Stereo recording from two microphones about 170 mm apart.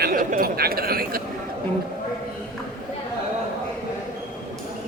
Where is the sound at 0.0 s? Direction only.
55° right (ahead or behind).